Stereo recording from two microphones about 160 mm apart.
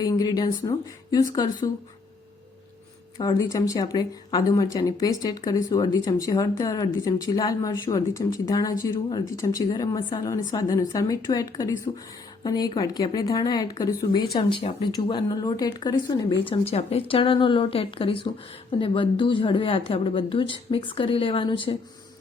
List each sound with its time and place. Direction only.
0.0 s speech: 25° left (ahead or behind)
3.2 s speech: 25° left (ahead or behind)
16.4 s a woman's voice: 35° left (ahead or behind)